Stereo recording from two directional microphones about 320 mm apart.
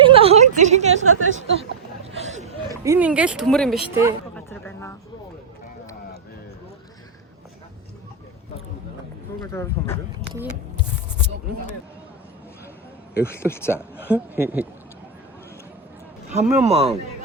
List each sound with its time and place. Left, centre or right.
0.0 s a sound: centre
0.9 s a woman's voice: right
1.4 s a man's voice: centre
2.1 s chatter: right
2.8 s speech: centre
4.4 s a sound: centre
9.4 s speech: centre
10.2 s speech: centre
13.3 s speech: centre
13.7 s speech: centre
16.6 s a man's voice: centre